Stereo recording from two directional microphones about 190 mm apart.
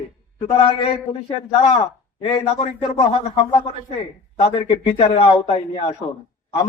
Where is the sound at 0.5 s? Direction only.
30° left (ahead or behind).